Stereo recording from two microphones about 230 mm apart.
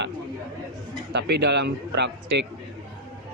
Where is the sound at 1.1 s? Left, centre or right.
Right.